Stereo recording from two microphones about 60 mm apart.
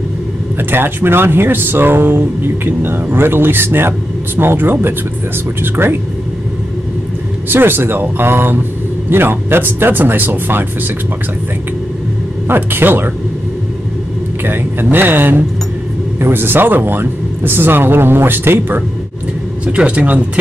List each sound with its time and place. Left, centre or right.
0.6 s speech: right
7.4 s speech: right
12.4 s speech: right
14.4 s speech: right
19.6 s speech: centre